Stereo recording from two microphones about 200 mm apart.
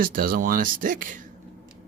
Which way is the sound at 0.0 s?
45° right (ahead or behind).